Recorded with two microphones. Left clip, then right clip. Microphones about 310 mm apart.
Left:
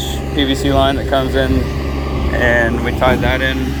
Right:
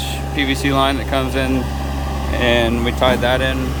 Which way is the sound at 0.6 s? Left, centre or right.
Centre.